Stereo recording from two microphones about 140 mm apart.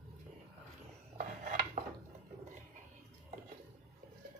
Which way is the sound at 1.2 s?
65° right (ahead or behind).